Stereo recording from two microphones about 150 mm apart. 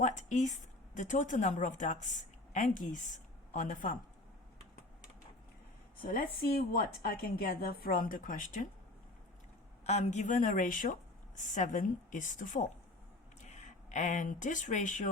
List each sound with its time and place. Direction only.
0.0 s a woman's voice: 55° left (ahead or behind)
6.0 s a woman's voice: 75° left (ahead or behind)
7.0 s a woman's voice: 85° left; by 8.6 s 65° left (ahead or behind)
9.8 s a woman's voice: 45° left (ahead or behind)